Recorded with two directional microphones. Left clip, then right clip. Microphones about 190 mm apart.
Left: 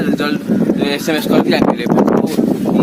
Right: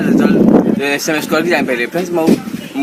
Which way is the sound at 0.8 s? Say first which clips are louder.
Right 1 dB; 15° left (ahead or behind).